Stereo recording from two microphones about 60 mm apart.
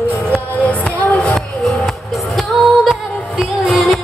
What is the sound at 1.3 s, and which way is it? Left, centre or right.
Music, centre.